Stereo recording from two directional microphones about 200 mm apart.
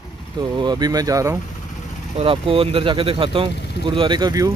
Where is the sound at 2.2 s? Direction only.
25° right (ahead or behind).